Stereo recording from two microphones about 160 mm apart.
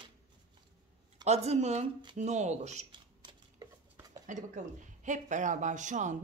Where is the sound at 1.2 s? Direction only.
40° right (ahead or behind).